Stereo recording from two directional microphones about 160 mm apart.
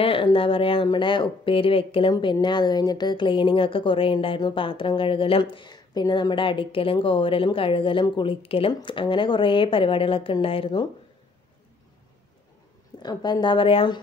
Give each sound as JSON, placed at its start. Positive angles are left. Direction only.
{"t": 0.0, "sound": "a woman's voice", "side_deg": 35}
{"t": 13.0, "sound": "a woman's voice", "side_deg": 25}